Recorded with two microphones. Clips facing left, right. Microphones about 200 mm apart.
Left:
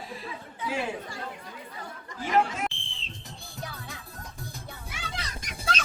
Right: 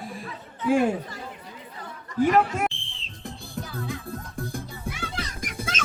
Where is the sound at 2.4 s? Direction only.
55° right (ahead or behind).